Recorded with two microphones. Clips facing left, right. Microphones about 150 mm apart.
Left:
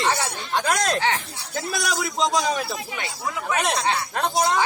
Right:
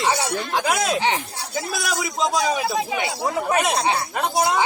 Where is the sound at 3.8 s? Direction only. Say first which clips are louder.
Right 2 dB; 10° right (ahead or behind).